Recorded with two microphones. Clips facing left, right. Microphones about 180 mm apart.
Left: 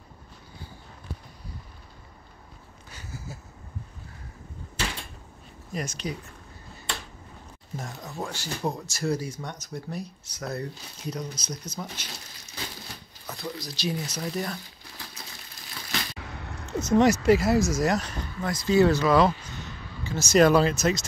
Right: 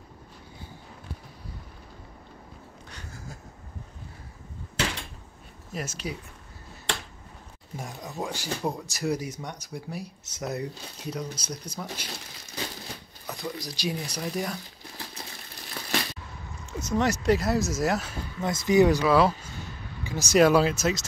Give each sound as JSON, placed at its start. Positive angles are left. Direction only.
{"t": 2.9, "sound": "a sound", "side_deg": 5}
{"t": 5.7, "sound": "speech", "side_deg": -5}
{"t": 7.7, "sound": "speech", "side_deg": -15}
{"t": 11.1, "sound": "speech", "side_deg": -10}
{"t": 13.4, "sound": "speech", "side_deg": -15}
{"t": 15.8, "sound": "crushing", "side_deg": -45}
{"t": 16.2, "sound": "a sound", "side_deg": 75}
{"t": 17.0, "sound": "speech", "side_deg": 5}
{"t": 18.4, "sound": "speech", "side_deg": -20}